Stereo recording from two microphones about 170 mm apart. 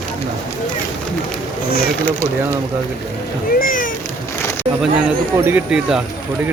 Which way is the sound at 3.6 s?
55° left (ahead or behind).